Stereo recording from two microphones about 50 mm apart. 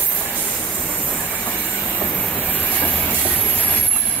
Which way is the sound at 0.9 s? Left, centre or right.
Left.